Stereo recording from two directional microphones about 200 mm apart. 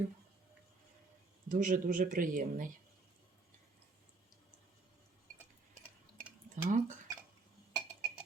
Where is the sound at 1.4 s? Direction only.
40° right (ahead or behind).